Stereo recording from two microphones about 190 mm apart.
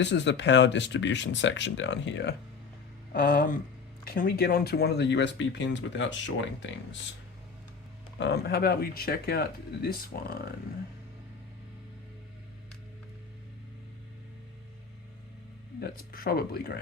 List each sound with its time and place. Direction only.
0.0 s speech: 70° left (ahead or behind)
3.1 s speech: 50° left (ahead or behind); by 6.7 s 75° left (ahead or behind)
8.2 s speech: 60° left (ahead or behind)
15.8 s speech: 55° left (ahead or behind)